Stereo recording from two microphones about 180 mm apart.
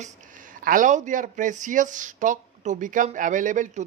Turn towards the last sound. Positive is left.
turn(degrees=-45)  # may be behind; listen again after turning